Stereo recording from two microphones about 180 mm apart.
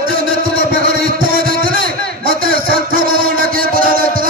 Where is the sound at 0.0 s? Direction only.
50° right (ahead or behind).